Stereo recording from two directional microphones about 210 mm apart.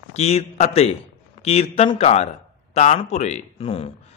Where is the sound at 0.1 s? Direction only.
30° left (ahead or behind).